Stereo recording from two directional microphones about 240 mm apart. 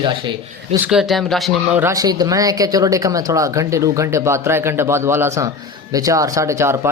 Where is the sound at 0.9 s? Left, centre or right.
Centre.